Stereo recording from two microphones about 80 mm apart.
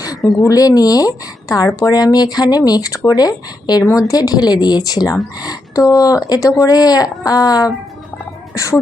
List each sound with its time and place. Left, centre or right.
0.4 s a woman's voice: left
8.5 s speech: left